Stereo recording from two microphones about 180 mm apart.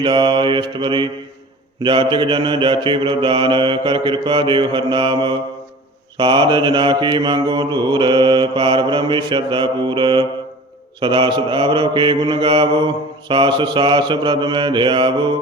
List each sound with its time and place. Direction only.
0.0 s mantra: 25° right (ahead or behind)